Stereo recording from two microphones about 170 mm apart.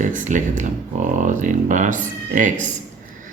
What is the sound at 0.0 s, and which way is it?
Speech, 50° right (ahead or behind).